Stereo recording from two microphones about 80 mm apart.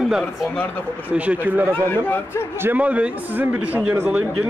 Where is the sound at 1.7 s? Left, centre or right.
Left.